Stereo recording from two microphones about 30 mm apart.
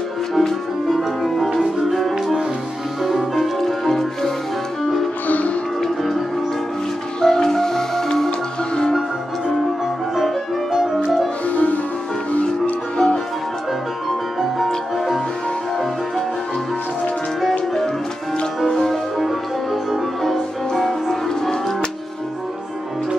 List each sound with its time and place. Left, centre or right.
0.3 s music: centre
0.8 s music: centre
3.3 s music: centre
5.3 s music: left
5.8 s music: centre
7.2 s music: left
10.1 s music: centre
11.4 s music: left
18.7 s music: centre
19.1 s music: centre
20.8 s music: centre